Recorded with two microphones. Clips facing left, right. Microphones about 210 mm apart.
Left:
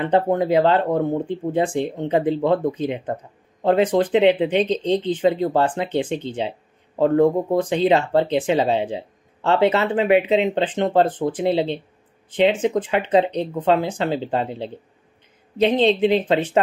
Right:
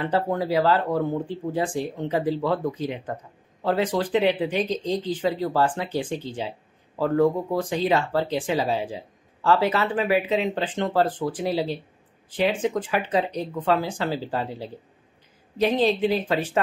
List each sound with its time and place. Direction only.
0.0 s speech: 20° left (ahead or behind)